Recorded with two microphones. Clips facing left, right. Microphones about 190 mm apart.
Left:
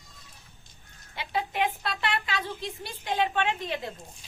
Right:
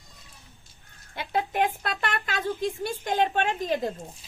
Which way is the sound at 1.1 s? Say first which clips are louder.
Right 3 dB; 50° right (ahead or behind).